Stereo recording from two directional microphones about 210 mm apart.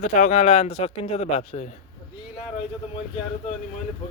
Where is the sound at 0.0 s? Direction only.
35° left (ahead or behind).